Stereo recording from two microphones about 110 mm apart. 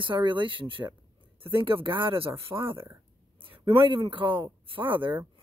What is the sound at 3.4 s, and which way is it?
Speech, 50° right (ahead or behind).